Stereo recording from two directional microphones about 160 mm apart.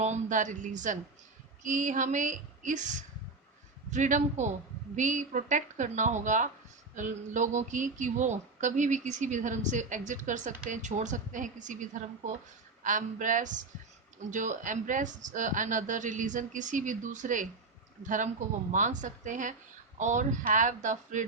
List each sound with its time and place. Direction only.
0.0 s speech: 50° right (ahead or behind)